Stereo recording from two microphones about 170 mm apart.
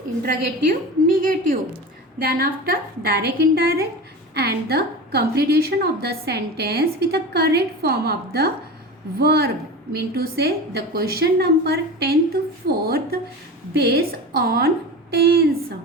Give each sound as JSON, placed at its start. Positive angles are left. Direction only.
{"t": 0.2, "sound": "a woman's voice", "side_deg": -55}